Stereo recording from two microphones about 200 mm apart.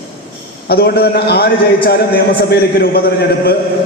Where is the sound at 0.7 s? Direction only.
50° left (ahead or behind).